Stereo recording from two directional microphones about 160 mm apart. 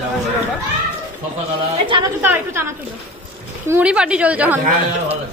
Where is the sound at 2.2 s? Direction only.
15° right (ahead or behind).